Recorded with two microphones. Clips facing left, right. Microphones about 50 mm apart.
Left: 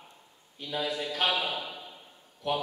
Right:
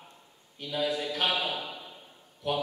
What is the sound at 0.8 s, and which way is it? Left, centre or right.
Speech, centre.